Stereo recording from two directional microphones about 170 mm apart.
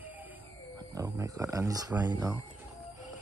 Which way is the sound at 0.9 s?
20° right (ahead or behind).